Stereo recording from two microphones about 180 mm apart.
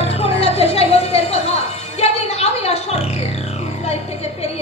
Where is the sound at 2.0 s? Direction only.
35° left (ahead or behind).